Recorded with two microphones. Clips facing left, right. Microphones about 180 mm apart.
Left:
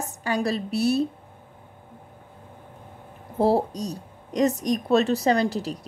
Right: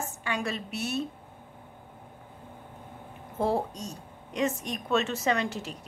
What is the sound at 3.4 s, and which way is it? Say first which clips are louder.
A woman's voice: left 7 dB; 35° left (ahead or behind).